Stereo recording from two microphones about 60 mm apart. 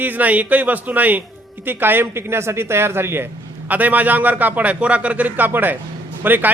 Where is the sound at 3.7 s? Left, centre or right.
Right.